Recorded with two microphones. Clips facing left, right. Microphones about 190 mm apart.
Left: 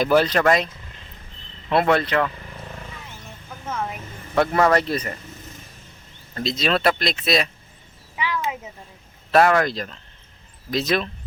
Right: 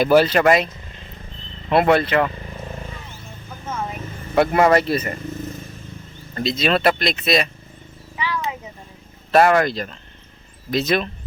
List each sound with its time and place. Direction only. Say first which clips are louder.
0.0 s speech: right 3 dB; 5° right (ahead or behind)
1.7 s speech: right 3 dB; 5° right (ahead or behind)
4.4 s speech: right 3 dB; 10° right (ahead or behind)
6.3 s speech: right 3 dB; centre (ahead or behind)
8.1 s cat: even; 10° left (ahead or behind)
9.3 s speech: right 2 dB; 5° right (ahead or behind)